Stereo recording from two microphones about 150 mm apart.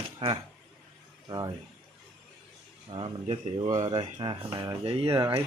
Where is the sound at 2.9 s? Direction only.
35° right (ahead or behind).